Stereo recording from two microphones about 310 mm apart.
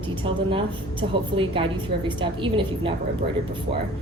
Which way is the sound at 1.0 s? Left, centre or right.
Right.